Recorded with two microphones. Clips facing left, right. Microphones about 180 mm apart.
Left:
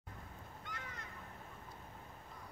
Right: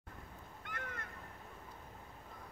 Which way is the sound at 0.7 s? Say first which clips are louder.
Right 4 dB; 55° right (ahead or behind).